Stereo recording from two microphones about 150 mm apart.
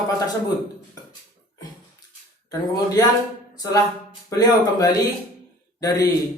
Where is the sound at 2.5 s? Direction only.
25° left (ahead or behind).